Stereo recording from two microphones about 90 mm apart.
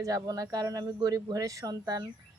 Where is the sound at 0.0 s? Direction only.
40° right (ahead or behind).